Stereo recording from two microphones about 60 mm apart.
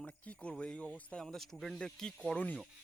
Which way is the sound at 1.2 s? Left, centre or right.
Centre.